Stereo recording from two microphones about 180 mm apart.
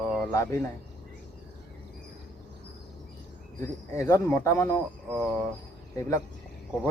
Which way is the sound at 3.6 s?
15° left (ahead or behind).